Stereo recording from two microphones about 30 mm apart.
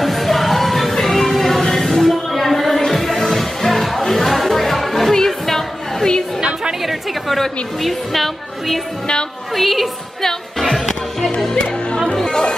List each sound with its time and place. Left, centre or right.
0.0 s music: centre
2.0 s a sound: centre
2.9 s music: centre
6.8 s chatter: centre
7.8 s a woman's voice: centre
10.6 s music: centre
11.5 s music: left
12.3 s chatter: left